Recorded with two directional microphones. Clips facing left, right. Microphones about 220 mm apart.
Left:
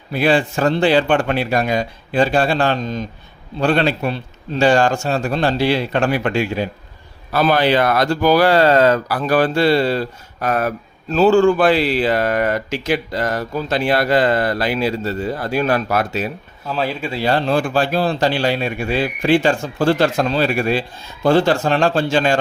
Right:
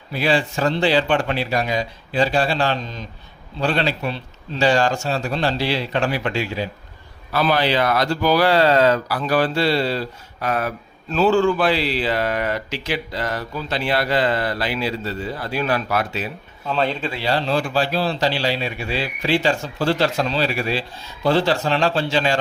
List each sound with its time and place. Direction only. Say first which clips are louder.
0.1 s speech: left 4 dB; 50° left (ahead or behind)
16.6 s speech: even; 5° left (ahead or behind)
17.2 s speech: left 5 dB; 50° left (ahead or behind)